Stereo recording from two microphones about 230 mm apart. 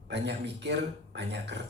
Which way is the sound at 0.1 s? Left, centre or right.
Right.